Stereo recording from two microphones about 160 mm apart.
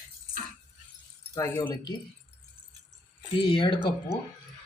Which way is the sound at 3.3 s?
30° left (ahead or behind).